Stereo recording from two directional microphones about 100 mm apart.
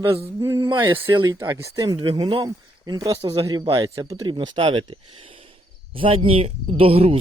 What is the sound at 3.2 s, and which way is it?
Speech, 70° right (ahead or behind).